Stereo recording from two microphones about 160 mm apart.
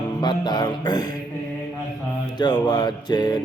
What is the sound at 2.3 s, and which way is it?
Mantra, 25° left (ahead or behind).